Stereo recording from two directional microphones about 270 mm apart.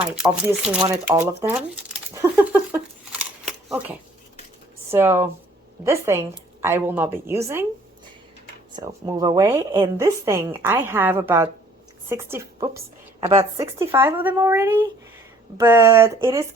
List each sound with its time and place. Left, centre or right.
0.0 s shuffling cards: centre
4.9 s a woman's voice: centre
8.7 s a woman's voice: centre